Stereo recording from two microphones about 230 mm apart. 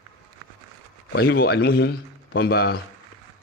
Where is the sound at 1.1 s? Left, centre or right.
Left.